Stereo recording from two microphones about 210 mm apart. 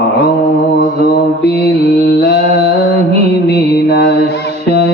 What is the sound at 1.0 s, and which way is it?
Mantra, 50° left (ahead or behind).